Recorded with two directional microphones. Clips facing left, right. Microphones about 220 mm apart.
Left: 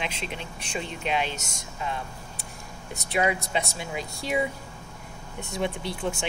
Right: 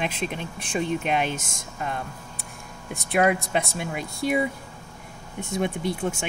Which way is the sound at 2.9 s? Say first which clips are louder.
Right 4 dB; 55° right (ahead or behind).